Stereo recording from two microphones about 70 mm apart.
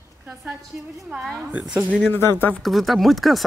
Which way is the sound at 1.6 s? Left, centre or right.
Centre.